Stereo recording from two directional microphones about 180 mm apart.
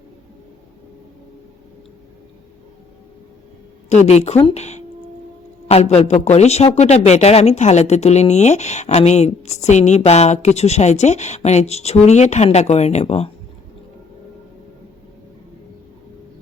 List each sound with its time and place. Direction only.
3.8 s a man's voice: 40° left (ahead or behind)